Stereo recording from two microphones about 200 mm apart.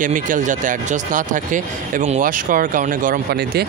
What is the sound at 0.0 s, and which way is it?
Speech, 40° right (ahead or behind).